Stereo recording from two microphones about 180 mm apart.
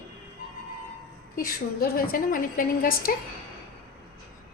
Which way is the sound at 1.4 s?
55° left (ahead or behind).